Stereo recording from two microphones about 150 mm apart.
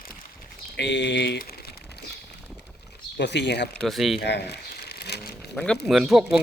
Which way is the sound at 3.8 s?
Centre (ahead or behind).